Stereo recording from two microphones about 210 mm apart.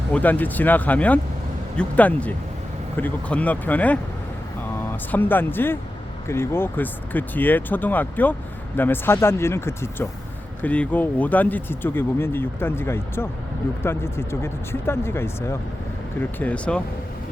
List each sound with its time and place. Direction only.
0.1 s speech: 10° left (ahead or behind)